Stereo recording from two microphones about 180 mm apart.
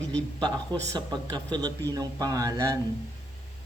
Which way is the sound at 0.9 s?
20° right (ahead or behind).